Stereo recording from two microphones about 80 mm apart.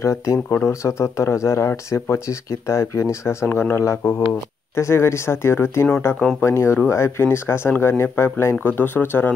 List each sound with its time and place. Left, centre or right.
0.0 s speech: left